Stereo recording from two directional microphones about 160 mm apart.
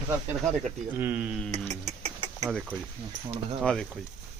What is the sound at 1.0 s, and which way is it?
Speech, 10° right (ahead or behind).